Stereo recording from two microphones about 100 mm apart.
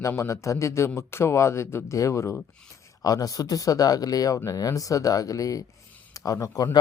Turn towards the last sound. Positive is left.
turn(degrees=35)  # may be behind; listen again after turning